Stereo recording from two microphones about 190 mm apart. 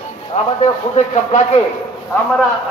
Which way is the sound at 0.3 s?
35° left (ahead or behind).